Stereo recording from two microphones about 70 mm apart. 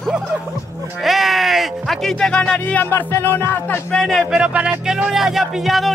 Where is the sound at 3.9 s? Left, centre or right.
Centre.